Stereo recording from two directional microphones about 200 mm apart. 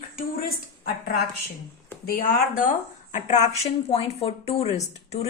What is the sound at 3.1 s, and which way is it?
A woman's voice, 35° left (ahead or behind).